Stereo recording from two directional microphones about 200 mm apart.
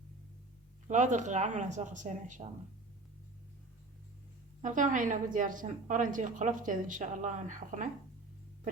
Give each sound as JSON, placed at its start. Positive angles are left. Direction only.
{"t": 0.9, "sound": "a woman's voice", "side_deg": -35}
{"t": 4.6, "sound": "a woman's voice", "side_deg": -40}